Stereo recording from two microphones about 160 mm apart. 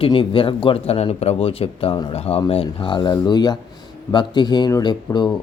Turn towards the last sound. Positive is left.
turn(degrees=25)  # may be behind; listen again after turning